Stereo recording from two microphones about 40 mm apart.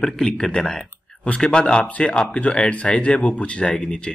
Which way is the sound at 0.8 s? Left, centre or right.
Left.